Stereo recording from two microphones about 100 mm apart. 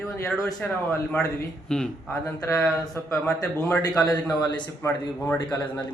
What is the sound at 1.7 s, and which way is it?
Speech, 5° left (ahead or behind).